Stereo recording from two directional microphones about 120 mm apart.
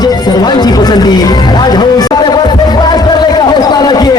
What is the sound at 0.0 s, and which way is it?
Music, 35° left (ahead or behind).